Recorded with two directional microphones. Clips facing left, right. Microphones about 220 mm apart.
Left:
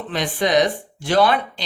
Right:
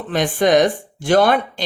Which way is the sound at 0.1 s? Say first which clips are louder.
Right 5 dB; 50° right (ahead or behind).